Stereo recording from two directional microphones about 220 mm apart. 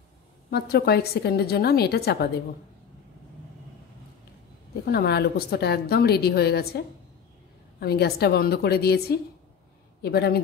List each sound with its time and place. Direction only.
0.5 s a woman's voice: 45° left (ahead or behind)
4.8 s a woman's voice: 45° left (ahead or behind)
7.8 s a woman's voice: 45° left (ahead or behind)